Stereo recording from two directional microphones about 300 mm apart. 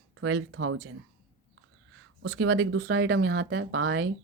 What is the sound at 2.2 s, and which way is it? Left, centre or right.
Speech, right.